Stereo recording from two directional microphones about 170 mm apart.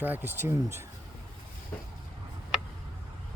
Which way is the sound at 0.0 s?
10° right (ahead or behind).